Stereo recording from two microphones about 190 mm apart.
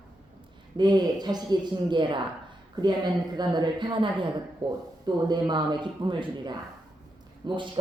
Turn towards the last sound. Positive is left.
turn(degrees=-25)  # may be behind; listen again after turning